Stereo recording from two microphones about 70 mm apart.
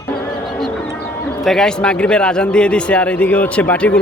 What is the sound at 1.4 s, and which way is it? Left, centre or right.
Speech, centre.